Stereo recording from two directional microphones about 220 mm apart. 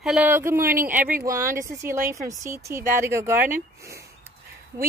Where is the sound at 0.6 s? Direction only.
40° right (ahead or behind).